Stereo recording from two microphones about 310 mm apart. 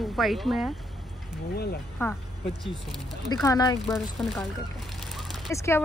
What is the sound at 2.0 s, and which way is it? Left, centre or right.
Speech, centre.